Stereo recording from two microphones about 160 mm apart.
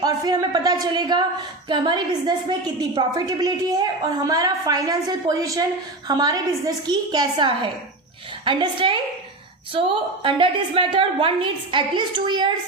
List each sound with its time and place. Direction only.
0.0 s a woman's voice: 25° right (ahead or behind)